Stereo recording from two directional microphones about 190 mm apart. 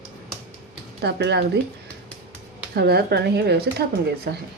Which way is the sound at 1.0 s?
60° right (ahead or behind).